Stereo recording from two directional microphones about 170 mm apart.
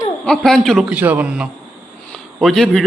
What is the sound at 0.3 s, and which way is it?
Speech, 5° left (ahead or behind).